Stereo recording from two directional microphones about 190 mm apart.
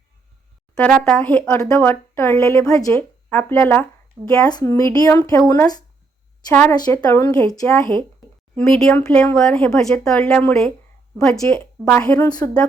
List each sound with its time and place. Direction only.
0.8 s speech: 5° left (ahead or behind)
8.5 s speech: centre (ahead or behind)